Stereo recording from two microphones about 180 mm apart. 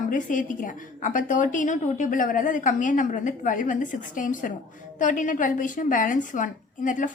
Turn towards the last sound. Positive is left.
turn(degrees=45)  # may be behind; listen again after turning